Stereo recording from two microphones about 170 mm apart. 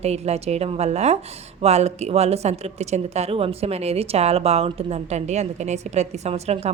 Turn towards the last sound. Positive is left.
turn(degrees=-40)  # may be behind; listen again after turning